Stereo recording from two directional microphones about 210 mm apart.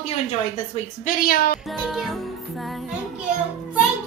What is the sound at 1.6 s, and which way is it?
Music, centre (ahead or behind).